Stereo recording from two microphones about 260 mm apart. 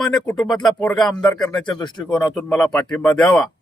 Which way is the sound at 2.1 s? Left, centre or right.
Centre.